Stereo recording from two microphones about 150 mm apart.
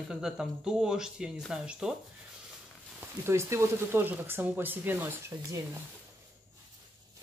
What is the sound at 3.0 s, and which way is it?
Speech, 15° right (ahead or behind).